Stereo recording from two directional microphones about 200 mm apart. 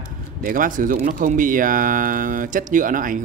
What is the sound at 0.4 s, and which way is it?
Speech, 45° right (ahead or behind).